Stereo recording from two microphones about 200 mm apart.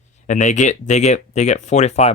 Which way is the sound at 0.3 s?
40° left (ahead or behind).